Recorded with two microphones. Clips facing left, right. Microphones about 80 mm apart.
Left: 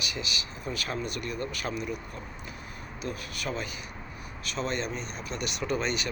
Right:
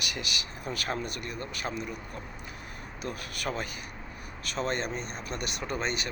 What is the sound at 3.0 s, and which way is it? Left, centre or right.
Speech, right.